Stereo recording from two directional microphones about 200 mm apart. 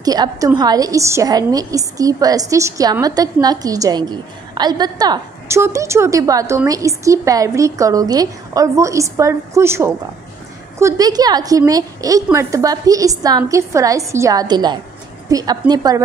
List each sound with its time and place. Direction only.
0.0 s a woman's voice: 20° right (ahead or behind)